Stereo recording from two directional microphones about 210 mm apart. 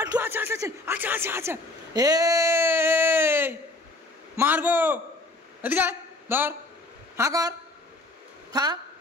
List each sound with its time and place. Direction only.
0.0 s a woman's voice: 15° right (ahead or behind)